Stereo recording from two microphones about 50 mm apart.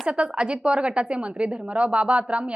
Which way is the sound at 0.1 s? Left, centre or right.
Centre.